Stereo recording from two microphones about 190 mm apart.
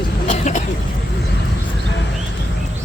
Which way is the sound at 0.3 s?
40° left (ahead or behind).